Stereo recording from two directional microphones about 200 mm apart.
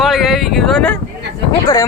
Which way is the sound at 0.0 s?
Centre (ahead or behind).